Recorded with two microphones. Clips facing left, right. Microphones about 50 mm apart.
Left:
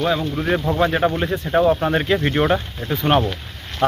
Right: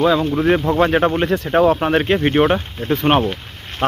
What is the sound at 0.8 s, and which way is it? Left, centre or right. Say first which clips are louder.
Speech: right 3 dB; right.